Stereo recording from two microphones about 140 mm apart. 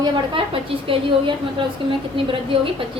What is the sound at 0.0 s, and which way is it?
Speech, 40° right (ahead or behind).